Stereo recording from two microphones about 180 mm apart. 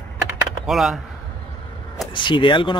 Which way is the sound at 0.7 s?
Centre (ahead or behind).